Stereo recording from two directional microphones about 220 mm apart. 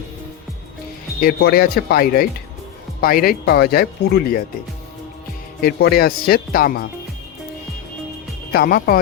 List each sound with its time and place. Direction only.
1.2 s speech: 45° left (ahead or behind)
5.6 s speech: 45° left (ahead or behind)
8.5 s speech: 45° left (ahead or behind)